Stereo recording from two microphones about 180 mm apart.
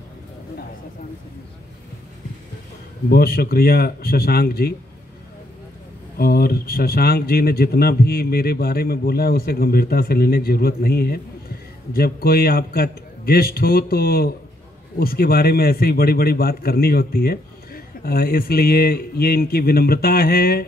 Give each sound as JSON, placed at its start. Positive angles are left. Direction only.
{"t": 3.1, "sound": "speech", "side_deg": 55}
{"t": 6.1, "sound": "speech", "side_deg": 55}